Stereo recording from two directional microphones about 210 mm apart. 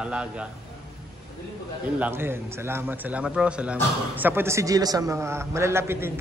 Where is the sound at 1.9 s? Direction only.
10° right (ahead or behind).